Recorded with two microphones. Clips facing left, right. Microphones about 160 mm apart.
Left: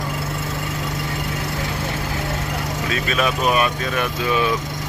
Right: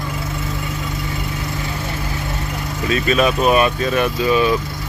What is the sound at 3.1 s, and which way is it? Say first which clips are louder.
Speech: right 4 dB; 30° right (ahead or behind).